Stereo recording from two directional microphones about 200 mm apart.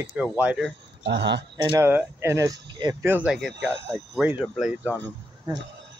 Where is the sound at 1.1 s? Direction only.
60° right (ahead or behind).